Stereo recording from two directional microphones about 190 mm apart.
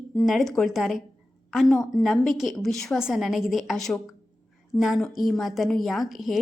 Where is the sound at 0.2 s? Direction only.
Centre (ahead or behind).